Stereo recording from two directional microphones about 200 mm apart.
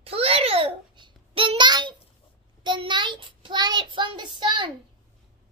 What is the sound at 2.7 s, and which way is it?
Child singing, 25° right (ahead or behind).